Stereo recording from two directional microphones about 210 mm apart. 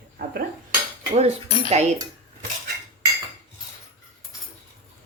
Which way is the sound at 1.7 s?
30° right (ahead or behind).